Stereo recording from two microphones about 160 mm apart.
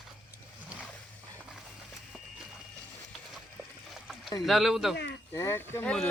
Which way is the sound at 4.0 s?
Centre (ahead or behind).